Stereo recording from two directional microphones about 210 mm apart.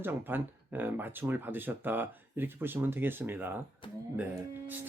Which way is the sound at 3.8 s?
25° left (ahead or behind).